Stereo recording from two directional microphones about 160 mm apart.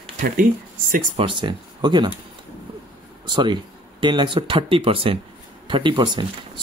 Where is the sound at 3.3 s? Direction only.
30° right (ahead or behind).